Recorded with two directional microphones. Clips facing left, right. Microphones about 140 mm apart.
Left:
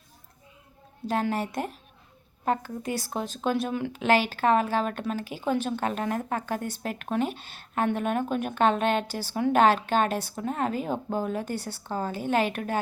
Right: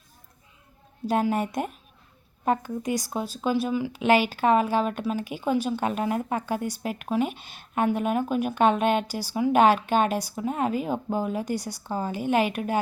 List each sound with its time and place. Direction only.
1.0 s speech: 15° right (ahead or behind)